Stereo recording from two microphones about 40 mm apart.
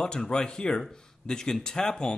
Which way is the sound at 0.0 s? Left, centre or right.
Centre.